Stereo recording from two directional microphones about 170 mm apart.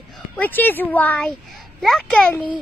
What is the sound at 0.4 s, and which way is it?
A child's voice, 10° left (ahead or behind).